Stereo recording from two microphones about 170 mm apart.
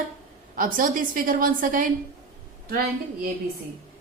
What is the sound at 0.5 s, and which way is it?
A woman's voice, 55° right (ahead or behind).